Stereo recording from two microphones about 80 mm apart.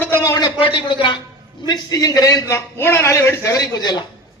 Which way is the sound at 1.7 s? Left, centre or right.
Left.